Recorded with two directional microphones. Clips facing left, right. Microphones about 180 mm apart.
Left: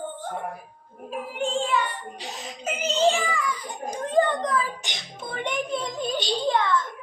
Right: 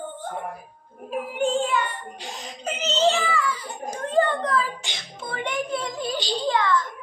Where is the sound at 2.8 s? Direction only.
10° left (ahead or behind).